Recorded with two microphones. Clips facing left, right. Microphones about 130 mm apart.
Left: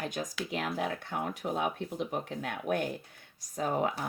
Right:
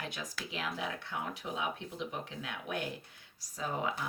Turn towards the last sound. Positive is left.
turn(degrees=50)  # may be behind; listen again after turning